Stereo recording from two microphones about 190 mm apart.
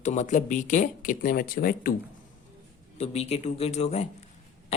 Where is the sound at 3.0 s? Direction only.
35° left (ahead or behind).